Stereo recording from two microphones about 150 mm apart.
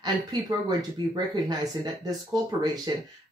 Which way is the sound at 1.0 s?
30° right (ahead or behind).